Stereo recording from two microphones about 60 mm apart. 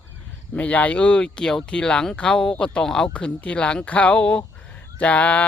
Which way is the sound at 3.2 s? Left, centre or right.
Left.